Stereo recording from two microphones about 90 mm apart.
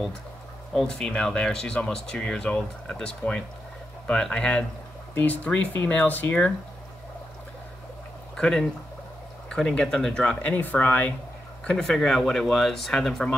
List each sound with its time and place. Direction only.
0.7 s speech: 5° left (ahead or behind)
8.4 s speech: 5° left (ahead or behind)
10.4 s speech: 15° left (ahead or behind)
11.6 s speech: 5° left (ahead or behind)